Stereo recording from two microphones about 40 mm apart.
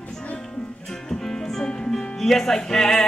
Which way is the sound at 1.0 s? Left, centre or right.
Centre.